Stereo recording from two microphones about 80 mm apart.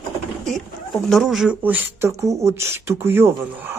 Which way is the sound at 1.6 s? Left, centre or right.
Right.